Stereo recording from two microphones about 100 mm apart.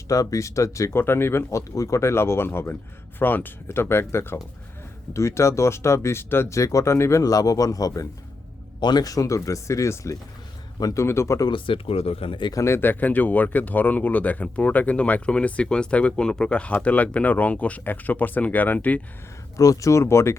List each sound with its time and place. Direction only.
0.1 s speech: 35° left (ahead or behind)
11.0 s speech: 25° left (ahead or behind)
11.4 s speech: 60° left (ahead or behind)
12.5 s speech: 30° left (ahead or behind); by 19.0 s 15° left (ahead or behind)
19.5 s speech: 35° left (ahead or behind)